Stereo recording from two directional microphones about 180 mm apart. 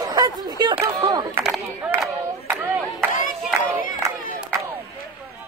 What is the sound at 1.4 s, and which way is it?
Crowd, 5° right (ahead or behind).